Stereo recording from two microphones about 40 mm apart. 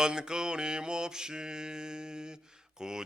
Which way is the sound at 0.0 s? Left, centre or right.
Centre.